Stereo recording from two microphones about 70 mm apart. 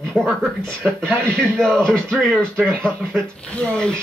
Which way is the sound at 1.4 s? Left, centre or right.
Centre.